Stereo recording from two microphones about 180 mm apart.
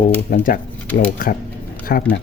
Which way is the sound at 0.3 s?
50° left (ahead or behind).